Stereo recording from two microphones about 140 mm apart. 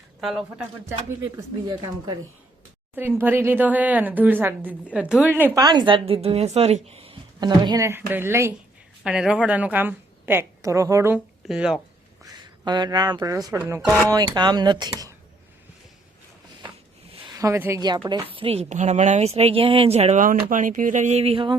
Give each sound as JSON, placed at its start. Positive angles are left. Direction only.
{"t": 0.2, "sound": "speech", "side_deg": 0}
{"t": 0.9, "sound": "speech", "side_deg": -20}
{"t": 1.6, "sound": "speech", "side_deg": -35}
{"t": 3.2, "sound": "a woman's voice", "side_deg": -15}
{"t": 5.5, "sound": "a woman's voice", "side_deg": -30}
{"t": 7.3, "sound": "speech", "side_deg": -30}
{"t": 7.9, "sound": "a woman's voice", "side_deg": -15}
{"t": 9.0, "sound": "a woman's voice", "side_deg": -5}
{"t": 11.4, "sound": "speech", "side_deg": -5}
{"t": 12.2, "sound": "speech", "side_deg": -30}
{"t": 14.1, "sound": "speech", "side_deg": -30}
{"t": 17.3, "sound": "speech", "side_deg": -20}
{"t": 18.1, "sound": "a woman's voice", "side_deg": -40}
{"t": 20.2, "sound": "speech", "side_deg": -70}